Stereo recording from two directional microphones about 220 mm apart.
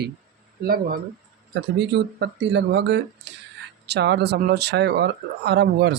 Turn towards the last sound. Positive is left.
turn(degrees=-50)  # may be behind; listen again after turning